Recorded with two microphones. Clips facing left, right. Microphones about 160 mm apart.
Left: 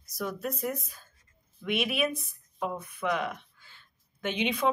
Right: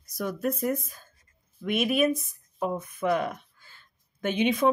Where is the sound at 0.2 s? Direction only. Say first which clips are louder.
Right 4 dB; 50° right (ahead or behind).